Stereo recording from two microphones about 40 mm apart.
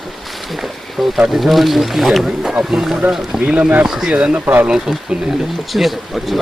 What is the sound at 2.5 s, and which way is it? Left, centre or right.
Speech, centre.